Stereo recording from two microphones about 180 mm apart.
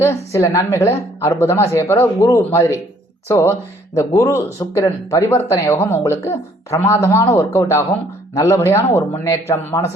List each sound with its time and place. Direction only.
0.0 s speech: 15° left (ahead or behind)